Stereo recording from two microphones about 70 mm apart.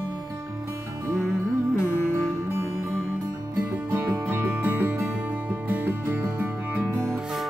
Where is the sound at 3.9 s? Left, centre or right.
Right.